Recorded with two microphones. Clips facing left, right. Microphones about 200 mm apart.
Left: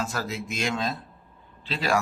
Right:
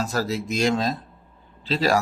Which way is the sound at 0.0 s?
35° right (ahead or behind).